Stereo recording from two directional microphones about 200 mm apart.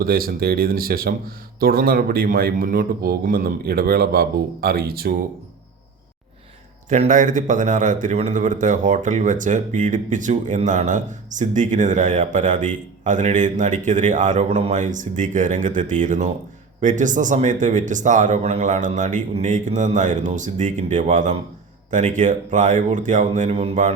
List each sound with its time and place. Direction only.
0.0 s speech: 50° right (ahead or behind)
6.8 s a man's voice: 35° right (ahead or behind)